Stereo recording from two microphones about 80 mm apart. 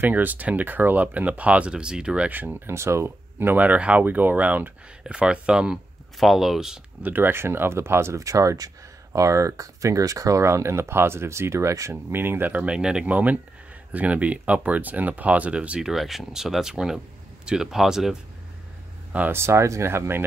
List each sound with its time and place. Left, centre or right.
0.0 s speech: right
2.7 s speech: right
5.0 s speech: centre
7.0 s speech: right
15.9 s speech: centre
19.3 s speech: right